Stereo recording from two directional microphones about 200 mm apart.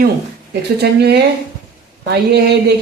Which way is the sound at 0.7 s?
55° right (ahead or behind).